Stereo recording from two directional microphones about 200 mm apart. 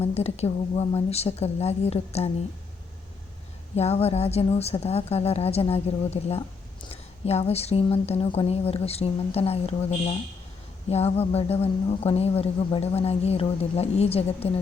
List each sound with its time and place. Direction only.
0.0 s a woman's voice: 30° left (ahead or behind)
3.8 s a woman's voice: 30° left (ahead or behind)